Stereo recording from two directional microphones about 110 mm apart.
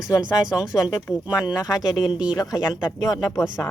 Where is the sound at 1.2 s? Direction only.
10° right (ahead or behind).